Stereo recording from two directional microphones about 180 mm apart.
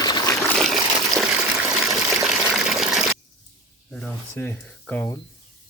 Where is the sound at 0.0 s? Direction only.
20° left (ahead or behind).